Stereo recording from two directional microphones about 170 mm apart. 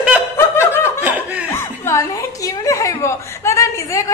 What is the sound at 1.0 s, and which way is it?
Laughter, 10° right (ahead or behind).